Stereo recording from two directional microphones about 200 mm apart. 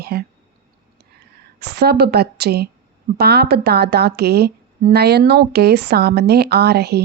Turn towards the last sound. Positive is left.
turn(degrees=-55)  # may be behind; listen again after turning